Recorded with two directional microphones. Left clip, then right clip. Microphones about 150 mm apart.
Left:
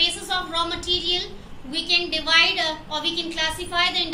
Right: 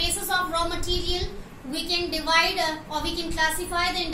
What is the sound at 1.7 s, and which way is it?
A woman's voice, 15° right (ahead or behind).